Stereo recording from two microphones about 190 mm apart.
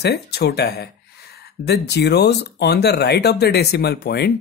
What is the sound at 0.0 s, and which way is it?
Speech, 60° left (ahead or behind).